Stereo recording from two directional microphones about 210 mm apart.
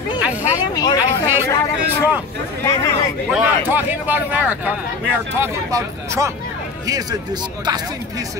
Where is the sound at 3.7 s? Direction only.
10° right (ahead or behind).